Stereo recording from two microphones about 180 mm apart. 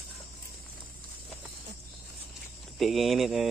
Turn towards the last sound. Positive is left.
turn(degrees=0)  # may be behind; listen again after turning